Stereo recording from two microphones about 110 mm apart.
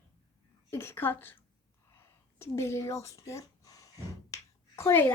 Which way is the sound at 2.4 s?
25° left (ahead or behind).